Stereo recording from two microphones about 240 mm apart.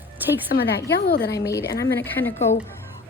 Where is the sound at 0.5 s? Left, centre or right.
Left.